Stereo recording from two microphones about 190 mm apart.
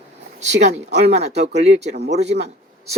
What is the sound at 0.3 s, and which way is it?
Speech, 35° right (ahead or behind).